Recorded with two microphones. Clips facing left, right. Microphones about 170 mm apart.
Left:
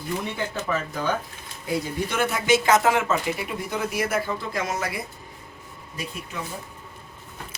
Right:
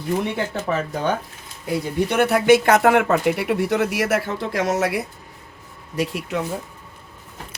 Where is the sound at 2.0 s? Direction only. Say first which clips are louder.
Right 8 dB; 65° right (ahead or behind); by 6.4 s 80° right.